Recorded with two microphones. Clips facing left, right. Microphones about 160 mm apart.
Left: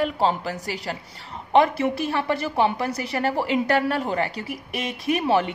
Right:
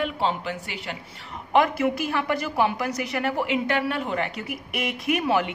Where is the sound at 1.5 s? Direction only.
30° left (ahead or behind).